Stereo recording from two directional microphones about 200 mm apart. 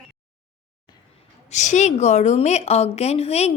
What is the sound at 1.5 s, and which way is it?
A woman's voice, 35° left (ahead or behind).